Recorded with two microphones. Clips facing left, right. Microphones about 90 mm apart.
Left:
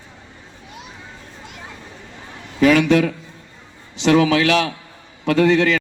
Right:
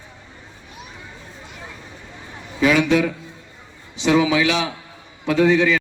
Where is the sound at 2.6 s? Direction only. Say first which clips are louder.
Left 3 dB; 60° left (ahead or behind).